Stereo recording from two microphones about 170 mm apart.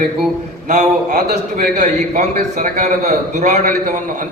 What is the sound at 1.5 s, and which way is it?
A man's voice, 45° right (ahead or behind).